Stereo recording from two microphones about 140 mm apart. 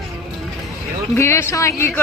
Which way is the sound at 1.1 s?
20° left (ahead or behind).